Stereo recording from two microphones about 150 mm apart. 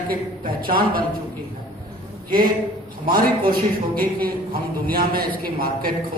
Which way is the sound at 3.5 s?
75° right (ahead or behind).